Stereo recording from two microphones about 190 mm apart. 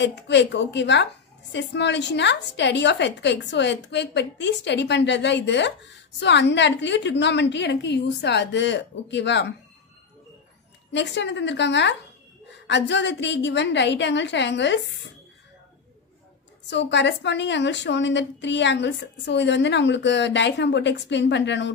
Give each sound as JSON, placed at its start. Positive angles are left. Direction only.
{"t": 0.0, "sound": "a woman's voice", "side_deg": 65}
{"t": 10.9, "sound": "a woman's voice", "side_deg": 65}
{"t": 16.6, "sound": "a woman's voice", "side_deg": 70}